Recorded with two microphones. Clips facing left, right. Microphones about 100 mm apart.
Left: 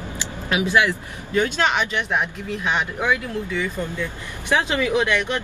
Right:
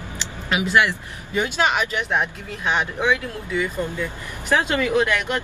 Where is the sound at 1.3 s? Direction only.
10° right (ahead or behind).